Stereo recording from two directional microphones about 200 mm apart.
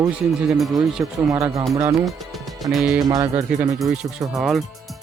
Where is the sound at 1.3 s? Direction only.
15° right (ahead or behind).